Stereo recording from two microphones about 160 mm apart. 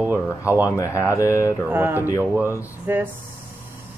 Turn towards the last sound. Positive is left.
turn(degrees=-15)  # may be behind; listen again after turning